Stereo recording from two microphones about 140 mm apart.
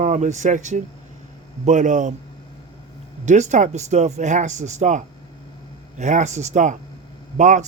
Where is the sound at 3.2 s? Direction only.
55° right (ahead or behind).